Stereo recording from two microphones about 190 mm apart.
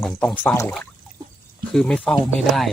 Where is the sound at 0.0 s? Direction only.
5° left (ahead or behind).